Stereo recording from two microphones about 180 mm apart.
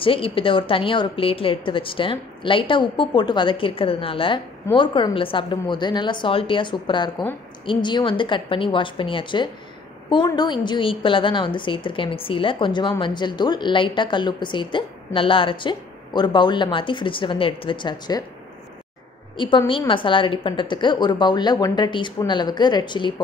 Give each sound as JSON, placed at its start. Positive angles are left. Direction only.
{"t": 0.0, "sound": "a woman's voice", "side_deg": 30}
{"t": 19.3, "sound": "a woman's voice", "side_deg": 25}